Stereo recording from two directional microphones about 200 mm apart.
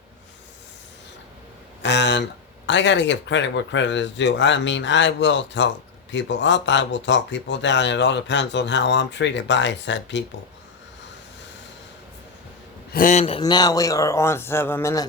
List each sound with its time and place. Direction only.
1.8 s speech: 60° left (ahead or behind)
12.9 s a man's voice: 40° left (ahead or behind)
13.4 s a man's voice: 20° left (ahead or behind)